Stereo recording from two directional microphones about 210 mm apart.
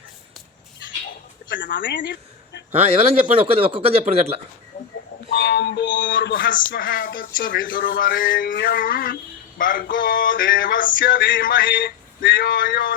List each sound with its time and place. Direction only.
1.7 s speech: 45° left (ahead or behind)
2.0 s a sound: 55° left (ahead or behind)
2.9 s speech: 30° right (ahead or behind)
5.4 s music: 50° left (ahead or behind)
6.0 s speech: 40° left (ahead or behind)